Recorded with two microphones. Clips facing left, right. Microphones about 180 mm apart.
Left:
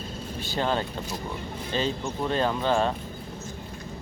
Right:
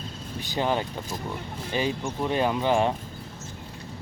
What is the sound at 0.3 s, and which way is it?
Speech, 15° right (ahead or behind).